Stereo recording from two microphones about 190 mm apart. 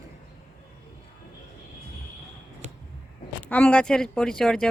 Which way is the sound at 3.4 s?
5° left (ahead or behind).